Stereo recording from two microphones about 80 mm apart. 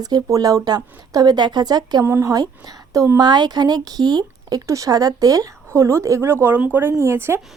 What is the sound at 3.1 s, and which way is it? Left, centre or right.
A woman's voice, right.